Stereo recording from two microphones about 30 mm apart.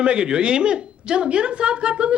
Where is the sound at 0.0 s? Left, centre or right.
Right.